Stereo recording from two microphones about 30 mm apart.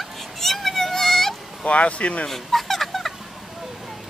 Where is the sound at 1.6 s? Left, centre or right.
Left.